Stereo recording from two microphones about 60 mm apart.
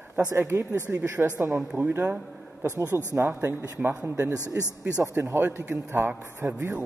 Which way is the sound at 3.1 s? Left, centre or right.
Right.